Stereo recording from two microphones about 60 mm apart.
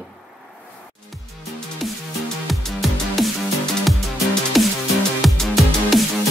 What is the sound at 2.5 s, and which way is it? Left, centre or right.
Music, centre.